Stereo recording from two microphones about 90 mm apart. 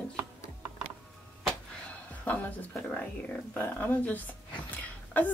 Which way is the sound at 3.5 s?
20° left (ahead or behind).